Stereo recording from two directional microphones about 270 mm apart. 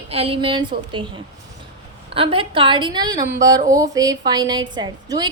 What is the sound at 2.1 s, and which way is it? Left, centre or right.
A woman's voice, centre.